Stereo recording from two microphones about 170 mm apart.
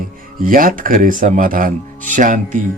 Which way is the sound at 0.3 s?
55° right (ahead or behind).